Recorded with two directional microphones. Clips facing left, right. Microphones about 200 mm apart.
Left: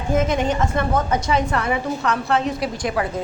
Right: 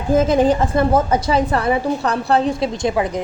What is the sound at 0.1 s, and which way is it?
A woman's voice, 30° right (ahead or behind).